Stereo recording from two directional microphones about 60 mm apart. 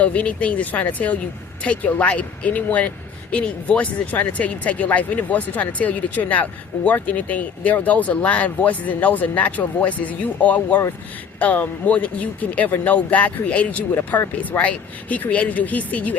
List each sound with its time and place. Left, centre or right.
0.0 s speech: left
13.9 s speech: left